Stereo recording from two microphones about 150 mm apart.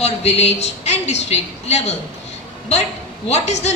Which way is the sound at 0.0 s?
45° left (ahead or behind).